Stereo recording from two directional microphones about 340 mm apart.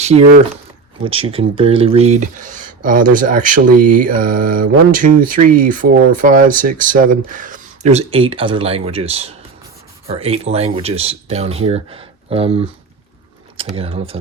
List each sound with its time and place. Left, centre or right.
0.0 s speech: centre